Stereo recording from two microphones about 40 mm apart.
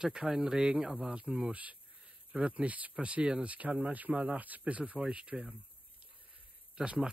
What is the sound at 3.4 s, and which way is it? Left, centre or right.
Speech, right.